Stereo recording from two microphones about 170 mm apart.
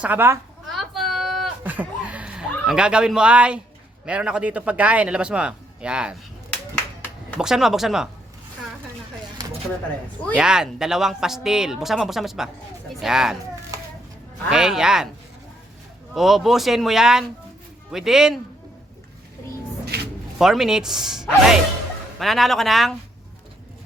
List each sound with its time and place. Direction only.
0.0 s a man's voice: 10° right (ahead or behind)
0.7 s a sound: centre (ahead or behind)
1.6 s a man's voice: 10° right (ahead or behind)
7.3 s speech: 5° right (ahead or behind)
10.3 s speech: 5° right (ahead or behind)
14.5 s speech: 5° right (ahead or behind)
16.1 s speech: centre (ahead or behind)
19.9 s a sound: 75° right (ahead or behind)
20.4 s speech: centre (ahead or behind)